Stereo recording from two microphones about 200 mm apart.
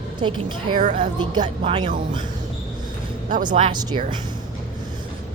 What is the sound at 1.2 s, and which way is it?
Speech, 25° right (ahead or behind).